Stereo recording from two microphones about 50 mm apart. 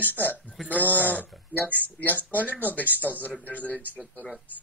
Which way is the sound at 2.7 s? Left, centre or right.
Left.